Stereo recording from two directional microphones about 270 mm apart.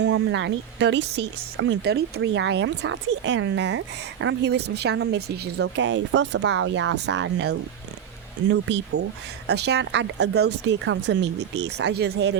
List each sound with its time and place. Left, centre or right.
0.0 s speech: right